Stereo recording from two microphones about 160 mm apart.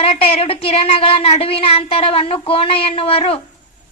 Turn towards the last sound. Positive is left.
turn(degrees=35)  # may be behind; listen again after turning